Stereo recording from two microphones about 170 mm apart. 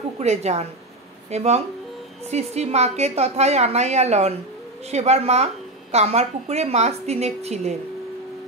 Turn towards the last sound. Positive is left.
turn(degrees=-40)  # may be behind; listen again after turning